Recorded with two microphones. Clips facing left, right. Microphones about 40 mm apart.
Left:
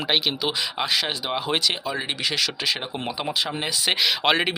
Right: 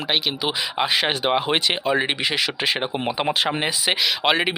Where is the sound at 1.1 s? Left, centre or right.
Right.